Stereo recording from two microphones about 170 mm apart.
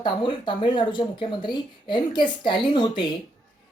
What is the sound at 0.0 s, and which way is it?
A woman's voice, 30° left (ahead or behind).